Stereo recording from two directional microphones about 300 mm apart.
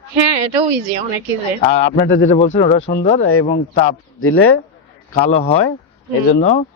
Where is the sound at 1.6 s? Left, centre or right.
Centre.